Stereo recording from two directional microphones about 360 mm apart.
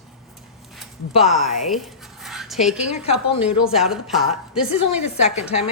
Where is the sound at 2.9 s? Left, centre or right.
Centre.